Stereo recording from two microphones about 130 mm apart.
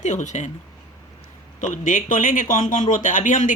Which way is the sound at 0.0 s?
70° left (ahead or behind).